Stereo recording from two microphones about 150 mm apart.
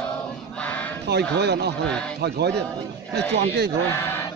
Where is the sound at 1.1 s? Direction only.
90° right.